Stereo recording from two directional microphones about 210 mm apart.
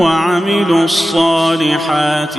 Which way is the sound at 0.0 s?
Centre (ahead or behind).